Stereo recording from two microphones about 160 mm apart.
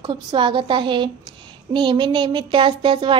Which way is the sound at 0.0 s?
30° right (ahead or behind).